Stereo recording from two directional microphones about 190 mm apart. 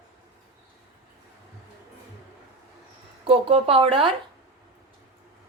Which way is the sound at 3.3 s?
30° right (ahead or behind).